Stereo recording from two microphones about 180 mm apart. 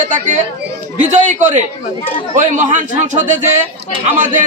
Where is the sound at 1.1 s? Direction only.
45° right (ahead or behind).